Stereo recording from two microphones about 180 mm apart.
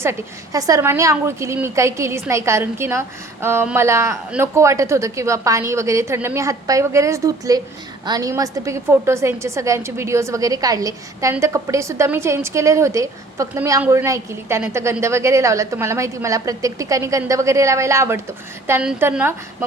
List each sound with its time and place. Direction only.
0.0 s a woman's voice: 15° right (ahead or behind)